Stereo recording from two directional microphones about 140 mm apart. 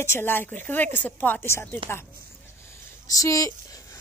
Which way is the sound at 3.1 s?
25° left (ahead or behind).